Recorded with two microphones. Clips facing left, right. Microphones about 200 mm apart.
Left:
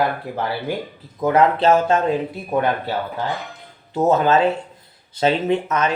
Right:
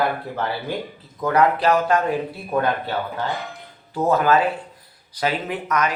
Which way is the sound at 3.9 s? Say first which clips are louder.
Left 2 dB; 25° left (ahead or behind).